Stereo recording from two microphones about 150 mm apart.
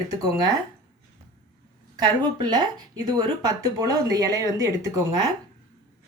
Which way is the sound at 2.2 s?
25° right (ahead or behind).